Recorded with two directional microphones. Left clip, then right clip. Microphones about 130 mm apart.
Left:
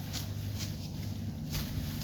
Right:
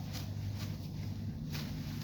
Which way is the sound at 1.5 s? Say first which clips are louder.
Left 4 dB; 55° left (ahead or behind).